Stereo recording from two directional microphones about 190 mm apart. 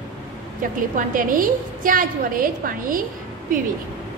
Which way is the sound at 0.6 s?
45° right (ahead or behind).